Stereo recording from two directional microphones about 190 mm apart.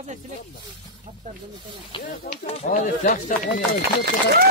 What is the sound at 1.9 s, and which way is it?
Speech, 25° left (ahead or behind).